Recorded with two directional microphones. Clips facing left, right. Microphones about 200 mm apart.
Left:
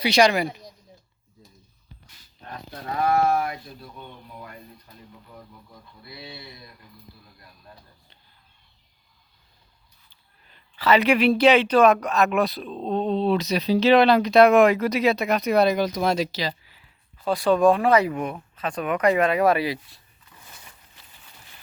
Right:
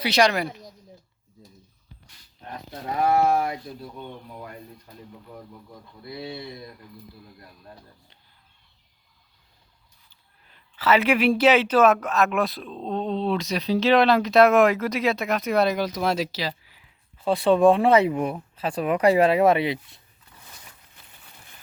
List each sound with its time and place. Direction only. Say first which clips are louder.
0.0 s speech: left 2 dB; centre (ahead or behind)
2.5 s speech: right 1 dB; 20° right (ahead or behind)
6.0 s speech: right 7 dB; 45° right (ahead or behind)
10.5 s speech: left 1 dB; 5° right (ahead or behind)
17.2 s speech: right 1 dB; 25° right (ahead or behind)